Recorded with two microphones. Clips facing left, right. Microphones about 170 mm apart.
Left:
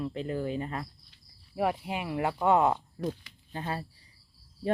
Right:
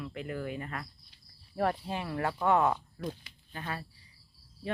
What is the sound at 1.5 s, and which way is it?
Speech, 10° left (ahead or behind).